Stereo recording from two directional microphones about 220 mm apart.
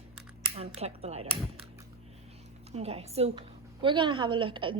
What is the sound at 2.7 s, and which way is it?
A woman's voice, 30° right (ahead or behind).